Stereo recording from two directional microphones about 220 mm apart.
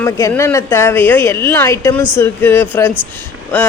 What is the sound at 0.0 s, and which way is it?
A woman's voice, 15° left (ahead or behind).